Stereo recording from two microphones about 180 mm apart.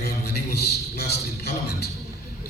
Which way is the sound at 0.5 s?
65° left (ahead or behind).